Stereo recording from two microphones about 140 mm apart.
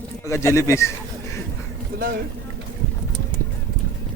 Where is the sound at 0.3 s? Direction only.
20° left (ahead or behind).